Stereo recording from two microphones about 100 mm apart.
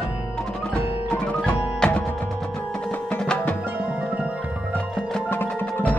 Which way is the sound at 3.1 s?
15° left (ahead or behind).